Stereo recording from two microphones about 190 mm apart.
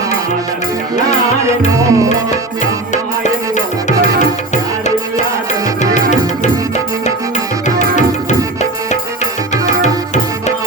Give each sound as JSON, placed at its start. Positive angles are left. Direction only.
{"t": 1.0, "sound": "music", "side_deg": -15}
{"t": 5.8, "sound": "music", "side_deg": 40}